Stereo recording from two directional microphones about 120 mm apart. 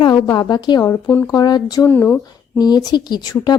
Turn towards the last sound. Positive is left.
turn(degrees=35)  # may be behind; listen again after turning